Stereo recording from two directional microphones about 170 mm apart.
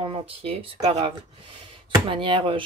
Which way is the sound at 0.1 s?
35° right (ahead or behind).